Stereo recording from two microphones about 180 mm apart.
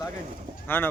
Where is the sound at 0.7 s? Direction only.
10° left (ahead or behind).